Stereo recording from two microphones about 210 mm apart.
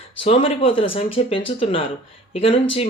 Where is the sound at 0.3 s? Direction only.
30° left (ahead or behind).